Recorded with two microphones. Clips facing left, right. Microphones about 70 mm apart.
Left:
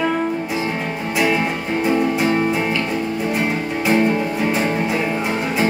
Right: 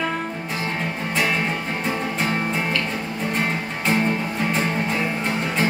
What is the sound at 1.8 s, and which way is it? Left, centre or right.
Music, centre.